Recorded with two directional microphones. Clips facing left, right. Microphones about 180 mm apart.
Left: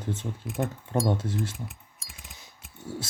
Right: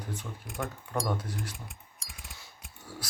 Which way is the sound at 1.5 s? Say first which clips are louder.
Left 7 dB; centre (ahead or behind).